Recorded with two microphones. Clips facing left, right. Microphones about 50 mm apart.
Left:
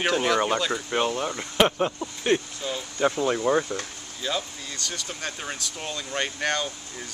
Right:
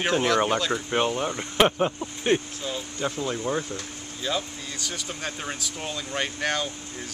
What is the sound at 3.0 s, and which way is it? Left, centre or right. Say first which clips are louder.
Speech: left 6 dB; left.